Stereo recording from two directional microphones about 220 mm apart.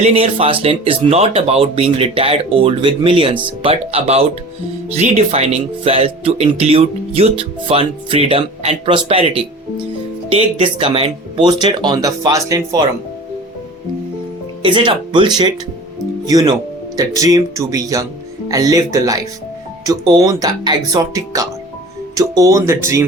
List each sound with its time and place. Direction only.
0.0 s speech: 25° right (ahead or behind)
14.6 s speech: 20° right (ahead or behind)